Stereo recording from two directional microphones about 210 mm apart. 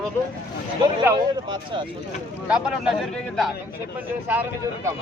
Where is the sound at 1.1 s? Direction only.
20° right (ahead or behind).